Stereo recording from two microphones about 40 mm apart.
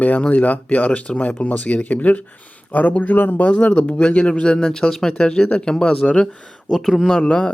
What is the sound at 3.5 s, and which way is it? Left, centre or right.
Speech, left.